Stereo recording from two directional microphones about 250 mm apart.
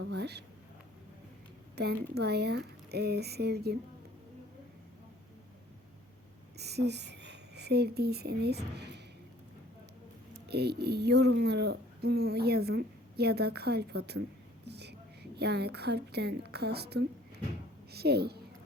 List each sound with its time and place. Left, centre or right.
0.0 s speech: right
1.7 s speech: right
6.6 s speech: right
10.5 s a woman's voice: right